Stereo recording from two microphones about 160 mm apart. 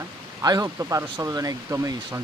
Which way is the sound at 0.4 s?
20° right (ahead or behind).